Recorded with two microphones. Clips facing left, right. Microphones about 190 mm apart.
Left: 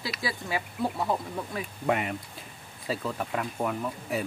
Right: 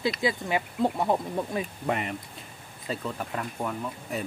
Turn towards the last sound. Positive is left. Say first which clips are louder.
# left 2 dB
turn(degrees=5)  # may be behind; listen again after turning